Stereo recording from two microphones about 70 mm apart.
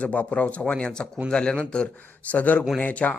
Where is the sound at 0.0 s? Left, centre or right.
Left.